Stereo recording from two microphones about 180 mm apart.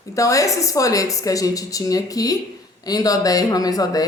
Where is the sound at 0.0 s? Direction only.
20° left (ahead or behind).